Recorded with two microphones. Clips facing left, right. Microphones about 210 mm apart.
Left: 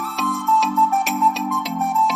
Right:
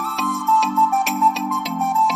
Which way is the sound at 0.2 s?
Centre (ahead or behind).